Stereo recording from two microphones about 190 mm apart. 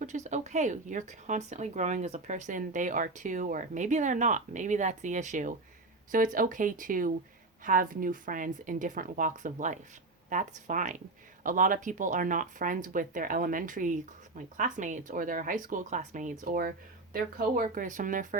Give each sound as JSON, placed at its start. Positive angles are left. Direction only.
{"t": 0.0, "sound": "speech", "side_deg": -40}